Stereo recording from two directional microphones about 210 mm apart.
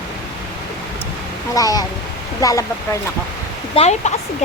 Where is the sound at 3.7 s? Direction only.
30° left (ahead or behind).